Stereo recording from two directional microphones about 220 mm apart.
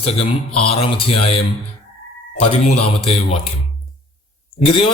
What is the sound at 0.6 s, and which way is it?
Speech, 25° left (ahead or behind).